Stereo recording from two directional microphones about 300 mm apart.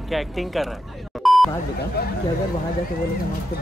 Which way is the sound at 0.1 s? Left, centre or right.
Centre.